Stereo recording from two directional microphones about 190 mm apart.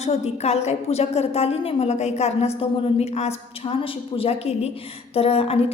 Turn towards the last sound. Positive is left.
turn(degrees=30)  # may be behind; listen again after turning